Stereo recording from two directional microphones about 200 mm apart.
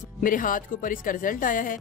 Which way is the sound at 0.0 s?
40° left (ahead or behind).